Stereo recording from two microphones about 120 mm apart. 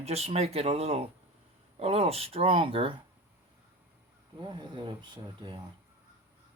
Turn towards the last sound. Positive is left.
turn(degrees=-45)  # may be behind; listen again after turning